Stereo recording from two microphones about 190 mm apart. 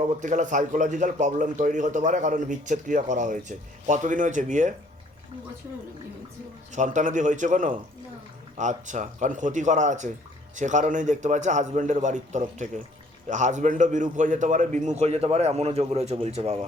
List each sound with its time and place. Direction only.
0.0 s a man's voice: 40° right (ahead or behind)
6.7 s a man's voice: 40° right (ahead or behind)